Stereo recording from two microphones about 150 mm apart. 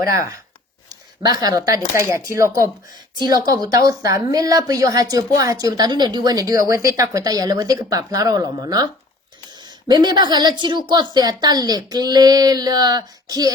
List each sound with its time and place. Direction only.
0.0 s speech: 20° right (ahead or behind)